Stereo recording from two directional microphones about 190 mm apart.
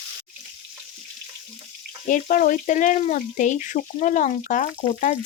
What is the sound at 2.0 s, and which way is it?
Speech, 45° left (ahead or behind).